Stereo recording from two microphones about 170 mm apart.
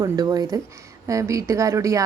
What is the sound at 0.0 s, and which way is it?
Speech, 20° right (ahead or behind).